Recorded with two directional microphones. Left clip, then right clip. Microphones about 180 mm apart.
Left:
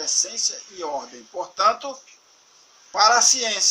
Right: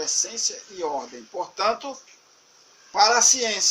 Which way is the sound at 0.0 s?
20° left (ahead or behind).